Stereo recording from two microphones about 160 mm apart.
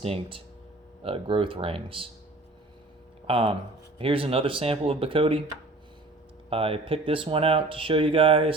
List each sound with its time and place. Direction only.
0.0 s speech: 35° right (ahead or behind)
3.2 s speech: 35° right (ahead or behind)
6.5 s speech: 35° right (ahead or behind)